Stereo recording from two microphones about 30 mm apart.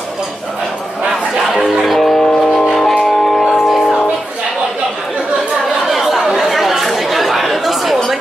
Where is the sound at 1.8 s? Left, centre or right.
Centre.